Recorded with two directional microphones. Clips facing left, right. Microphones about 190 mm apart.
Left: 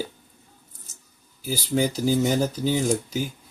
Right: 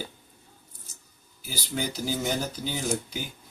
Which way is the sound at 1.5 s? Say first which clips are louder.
Left 8 dB; 40° left (ahead or behind).